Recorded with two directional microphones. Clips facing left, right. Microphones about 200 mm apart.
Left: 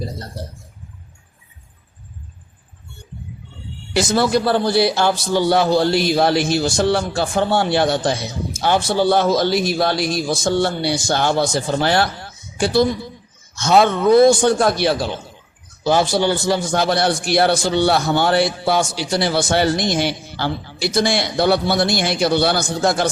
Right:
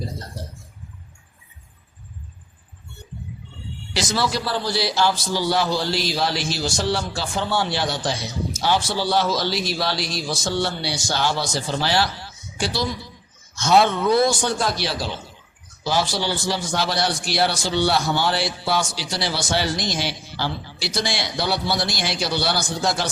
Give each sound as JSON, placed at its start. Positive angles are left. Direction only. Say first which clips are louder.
{"t": 3.9, "sound": "a man's voice", "louder": "left 7 dB", "side_deg": 55}